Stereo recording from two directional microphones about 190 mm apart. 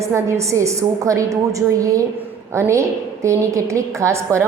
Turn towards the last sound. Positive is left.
turn(degrees=-15)  # may be behind; listen again after turning